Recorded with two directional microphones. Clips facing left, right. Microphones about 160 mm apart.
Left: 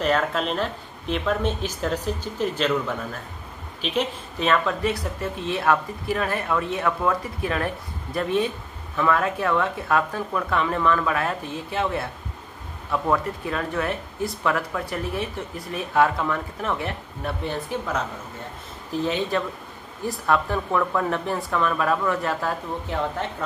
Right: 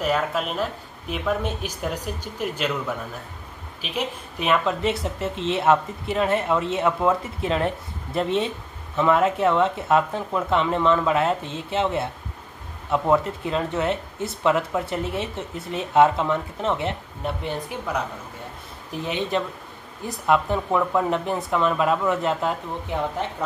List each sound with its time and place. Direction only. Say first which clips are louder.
0.0 s speech: left 1 dB; 10° right (ahead or behind)
3.8 s speech: left 3 dB; 10° right (ahead or behind)